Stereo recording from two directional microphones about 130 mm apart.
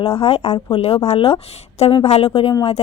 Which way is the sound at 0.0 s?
50° left (ahead or behind).